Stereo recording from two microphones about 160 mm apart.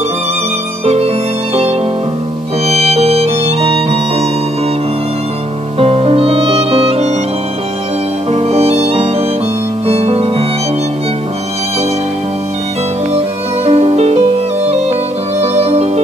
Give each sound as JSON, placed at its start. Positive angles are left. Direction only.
{"t": 0.8, "sound": "music", "side_deg": -40}
{"t": 5.8, "sound": "music", "side_deg": -40}
{"t": 8.3, "sound": "music", "side_deg": -40}
{"t": 13.7, "sound": "music", "side_deg": -40}
{"t": 15.4, "sound": "music", "side_deg": -40}